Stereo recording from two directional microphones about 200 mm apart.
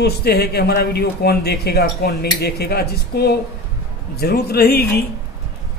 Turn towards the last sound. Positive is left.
turn(degrees=50)  # may be behind; listen again after turning